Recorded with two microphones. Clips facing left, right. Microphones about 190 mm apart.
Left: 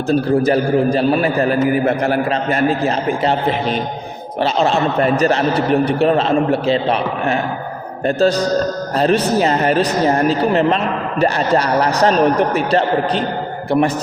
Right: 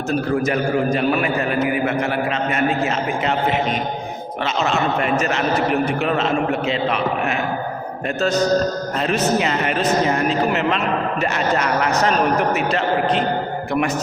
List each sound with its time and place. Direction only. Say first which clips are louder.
0.1 s speech: left 6 dB; 30° left (ahead or behind)